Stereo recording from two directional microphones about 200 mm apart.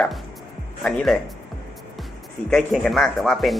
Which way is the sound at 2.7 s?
Centre (ahead or behind).